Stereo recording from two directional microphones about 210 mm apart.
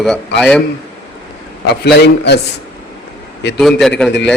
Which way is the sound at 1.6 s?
55° left (ahead or behind).